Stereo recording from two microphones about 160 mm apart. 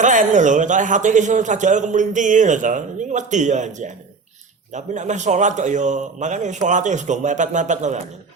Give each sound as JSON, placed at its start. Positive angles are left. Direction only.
{"t": 0.0, "sound": "a man's voice", "side_deg": -50}